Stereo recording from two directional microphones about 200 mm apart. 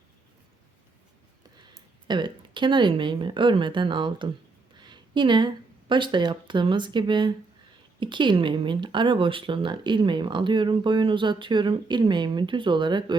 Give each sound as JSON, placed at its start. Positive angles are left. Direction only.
{"t": 2.0, "sound": "speech", "side_deg": -25}
{"t": 4.8, "sound": "a sound", "side_deg": -20}
{"t": 5.9, "sound": "speech", "side_deg": -25}